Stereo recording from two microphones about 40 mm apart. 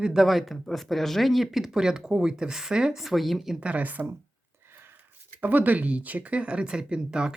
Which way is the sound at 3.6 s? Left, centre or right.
Right.